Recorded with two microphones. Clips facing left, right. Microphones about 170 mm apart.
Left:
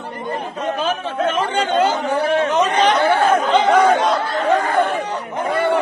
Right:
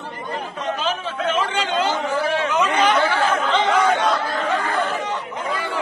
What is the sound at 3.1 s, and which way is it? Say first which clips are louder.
Chatter: left 5 dB; 55° left (ahead or behind).